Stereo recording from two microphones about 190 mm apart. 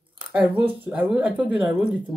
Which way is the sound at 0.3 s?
5° right (ahead or behind).